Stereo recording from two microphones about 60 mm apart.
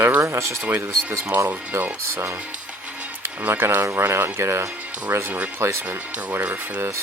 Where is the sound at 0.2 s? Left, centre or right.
Right.